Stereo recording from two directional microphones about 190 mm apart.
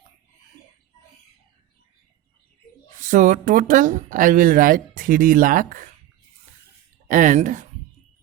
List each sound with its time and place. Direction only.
3.0 s speech: 45° right (ahead or behind)
7.1 s speech: 40° right (ahead or behind)